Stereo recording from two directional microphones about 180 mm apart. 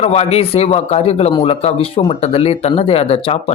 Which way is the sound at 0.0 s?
35° left (ahead or behind).